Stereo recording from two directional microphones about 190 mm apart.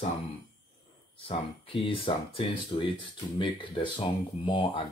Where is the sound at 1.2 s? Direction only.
30° left (ahead or behind).